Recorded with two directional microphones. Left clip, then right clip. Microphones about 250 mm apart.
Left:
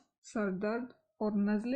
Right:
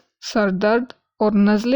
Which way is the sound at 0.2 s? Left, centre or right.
Right.